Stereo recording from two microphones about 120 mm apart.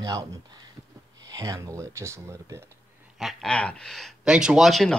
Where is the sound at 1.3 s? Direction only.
30° right (ahead or behind).